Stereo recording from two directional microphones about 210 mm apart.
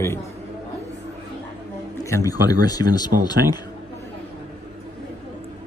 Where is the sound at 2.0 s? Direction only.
15° left (ahead or behind).